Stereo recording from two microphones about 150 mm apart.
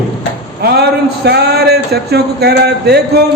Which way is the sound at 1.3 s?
90° right.